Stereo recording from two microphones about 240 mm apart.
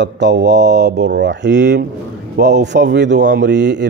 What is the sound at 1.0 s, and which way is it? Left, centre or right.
Speech, right.